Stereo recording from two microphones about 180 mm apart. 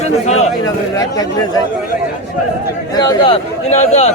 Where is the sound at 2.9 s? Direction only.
20° left (ahead or behind).